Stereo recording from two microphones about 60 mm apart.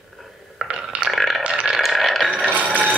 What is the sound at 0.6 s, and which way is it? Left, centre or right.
Burping, centre.